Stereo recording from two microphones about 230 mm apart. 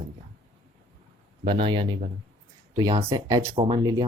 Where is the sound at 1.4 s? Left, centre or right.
Right.